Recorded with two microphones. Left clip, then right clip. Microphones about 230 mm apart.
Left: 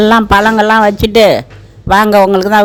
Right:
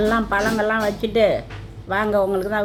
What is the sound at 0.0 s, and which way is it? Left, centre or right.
A man's voice, left.